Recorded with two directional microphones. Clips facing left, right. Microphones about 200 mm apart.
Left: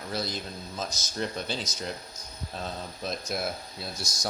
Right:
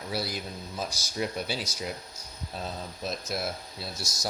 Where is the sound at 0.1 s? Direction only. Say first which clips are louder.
Even; 10° right (ahead or behind).